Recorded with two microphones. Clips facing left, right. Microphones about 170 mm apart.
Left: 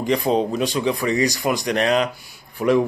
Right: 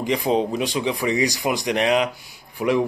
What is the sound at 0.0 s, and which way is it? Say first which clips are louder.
A man's voice: left 1 dB; 15° right (ahead or behind).